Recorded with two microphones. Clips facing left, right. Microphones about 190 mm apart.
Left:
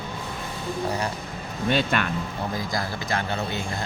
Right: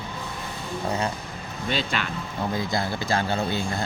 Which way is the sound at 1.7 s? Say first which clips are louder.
Left 4 dB; 55° left (ahead or behind).